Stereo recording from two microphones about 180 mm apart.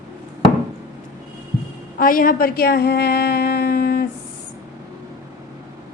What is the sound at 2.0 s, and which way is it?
A woman's voice, 50° left (ahead or behind).